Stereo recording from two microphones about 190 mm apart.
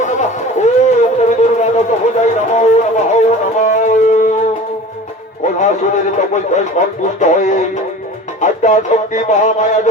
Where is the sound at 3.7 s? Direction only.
40° left (ahead or behind).